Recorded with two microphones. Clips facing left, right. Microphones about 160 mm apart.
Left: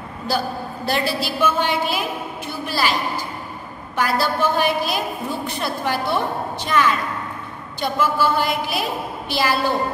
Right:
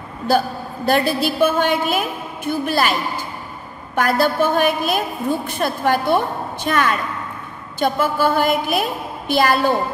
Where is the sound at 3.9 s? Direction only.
55° right (ahead or behind).